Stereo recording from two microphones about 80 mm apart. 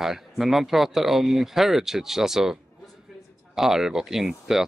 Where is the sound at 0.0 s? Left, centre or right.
Centre.